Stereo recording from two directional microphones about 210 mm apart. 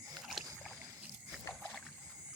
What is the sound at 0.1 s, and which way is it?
Rowboat, centre (ahead or behind).